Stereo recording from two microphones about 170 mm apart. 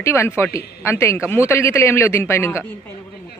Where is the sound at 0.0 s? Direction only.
15° left (ahead or behind).